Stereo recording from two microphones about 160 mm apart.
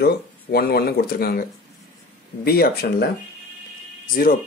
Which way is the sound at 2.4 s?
75° left (ahead or behind).